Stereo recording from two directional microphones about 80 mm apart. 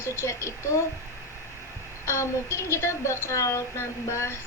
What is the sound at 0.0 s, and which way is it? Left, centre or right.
Speech, left.